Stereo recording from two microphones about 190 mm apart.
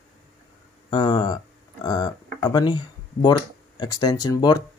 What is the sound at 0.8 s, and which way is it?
Speech, 20° left (ahead or behind).